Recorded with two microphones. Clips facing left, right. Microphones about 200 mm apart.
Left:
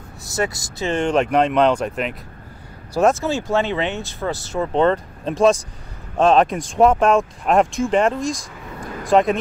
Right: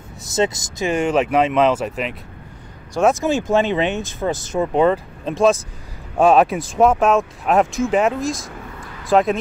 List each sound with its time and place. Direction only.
0.2 s speech: 20° right (ahead or behind); by 2.1 s centre (ahead or behind)
3.1 s speech: 15° right (ahead or behind)